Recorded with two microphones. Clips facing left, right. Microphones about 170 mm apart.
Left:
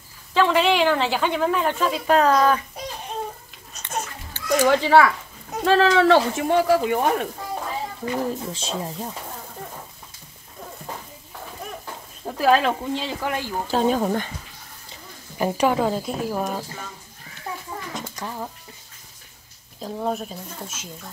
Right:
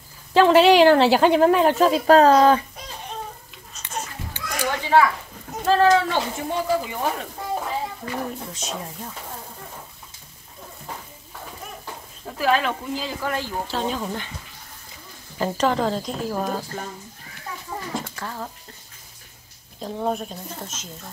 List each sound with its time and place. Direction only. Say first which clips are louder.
0.3 s a woman's voice: right 5 dB; 35° right (ahead or behind)
4.6 s a child's voice: left 2 dB; 90° left; by 7.2 s 65° left (ahead or behind)
8.0 s speech: left 4 dB; 30° left (ahead or behind)
12.4 s a woman's voice: left 3 dB; 35° left (ahead or behind)
13.7 s speech: left 11 dB; 45° left (ahead or behind)
15.3 s speech: left 1 dB; 15° left (ahead or behind)
17.9 s speech: even; 15° left (ahead or behind)
19.8 s speech: right 1 dB; centre (ahead or behind)